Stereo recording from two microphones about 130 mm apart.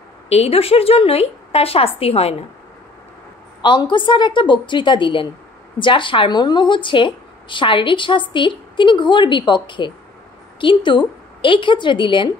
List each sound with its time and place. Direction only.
0.3 s speech: 50° left (ahead or behind)
3.6 s a woman's voice: 40° left (ahead or behind)